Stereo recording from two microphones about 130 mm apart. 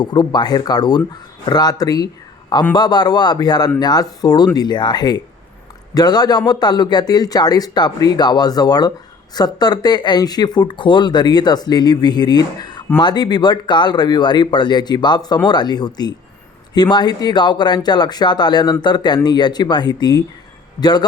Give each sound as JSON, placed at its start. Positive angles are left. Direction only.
{"t": 0.0, "sound": "speech", "side_deg": 35}